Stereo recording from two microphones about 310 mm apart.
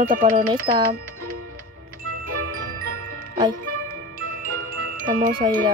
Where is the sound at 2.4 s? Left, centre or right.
Right.